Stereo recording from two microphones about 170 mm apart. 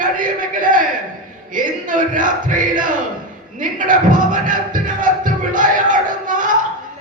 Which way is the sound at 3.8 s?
50° right (ahead or behind).